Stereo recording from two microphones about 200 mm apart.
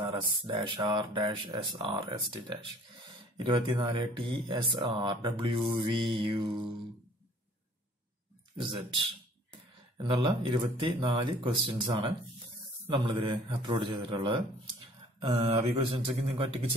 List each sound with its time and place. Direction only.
0.1 s speech: 25° right (ahead or behind)
9.9 s speech: 25° right (ahead or behind)